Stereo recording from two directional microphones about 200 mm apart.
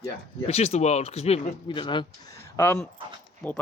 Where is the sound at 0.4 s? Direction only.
30° left (ahead or behind).